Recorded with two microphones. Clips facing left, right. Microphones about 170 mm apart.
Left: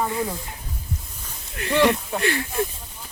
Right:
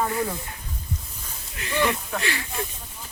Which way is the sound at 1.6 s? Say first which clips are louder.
Left 6 dB; 60° left (ahead or behind).